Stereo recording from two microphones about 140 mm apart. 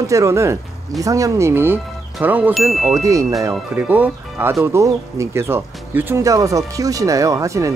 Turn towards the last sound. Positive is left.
turn(degrees=-20)  # may be behind; listen again after turning